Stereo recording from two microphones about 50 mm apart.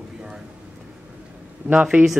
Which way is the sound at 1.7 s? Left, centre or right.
Right.